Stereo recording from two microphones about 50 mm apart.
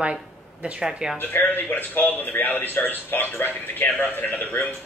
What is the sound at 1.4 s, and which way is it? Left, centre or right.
A man's voice, left.